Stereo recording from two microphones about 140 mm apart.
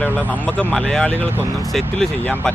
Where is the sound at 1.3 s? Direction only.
15° right (ahead or behind).